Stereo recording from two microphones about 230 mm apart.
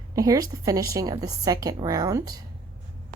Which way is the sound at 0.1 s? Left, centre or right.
Centre.